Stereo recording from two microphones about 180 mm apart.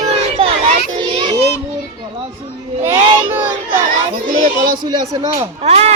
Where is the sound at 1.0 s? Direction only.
25° right (ahead or behind).